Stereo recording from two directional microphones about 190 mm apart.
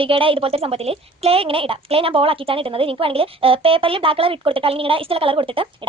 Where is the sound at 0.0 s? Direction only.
30° right (ahead or behind).